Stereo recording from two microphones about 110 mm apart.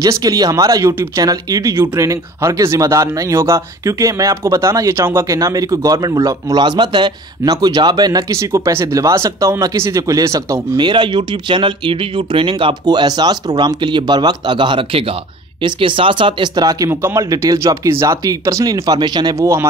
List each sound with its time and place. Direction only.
0.0 s speech: 35° right (ahead or behind)
10.8 s speech: 45° right (ahead or behind)
16.9 s speech: 25° right (ahead or behind); by 19.3 s 40° right (ahead or behind)
19.4 s speech: 25° right (ahead or behind)